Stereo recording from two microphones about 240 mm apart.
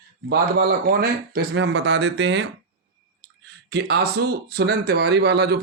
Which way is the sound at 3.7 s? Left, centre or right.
Right.